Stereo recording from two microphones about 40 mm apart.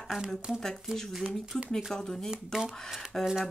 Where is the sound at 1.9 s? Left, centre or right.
Centre.